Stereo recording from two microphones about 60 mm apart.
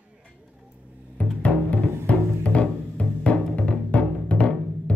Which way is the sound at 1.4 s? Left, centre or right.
Left.